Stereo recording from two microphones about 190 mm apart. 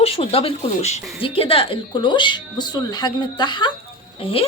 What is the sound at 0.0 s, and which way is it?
Speech, 30° left (ahead or behind).